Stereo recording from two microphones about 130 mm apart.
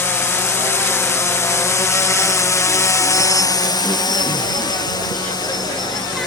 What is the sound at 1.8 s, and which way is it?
Helicopter, 20° left (ahead or behind).